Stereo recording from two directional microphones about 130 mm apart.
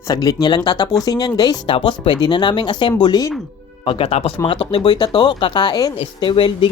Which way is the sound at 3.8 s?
45° left (ahead or behind).